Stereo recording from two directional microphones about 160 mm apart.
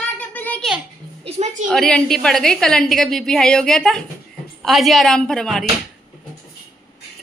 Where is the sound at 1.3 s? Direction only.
45° right (ahead or behind).